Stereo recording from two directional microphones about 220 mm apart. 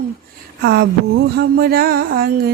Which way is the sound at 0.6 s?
45° right (ahead or behind).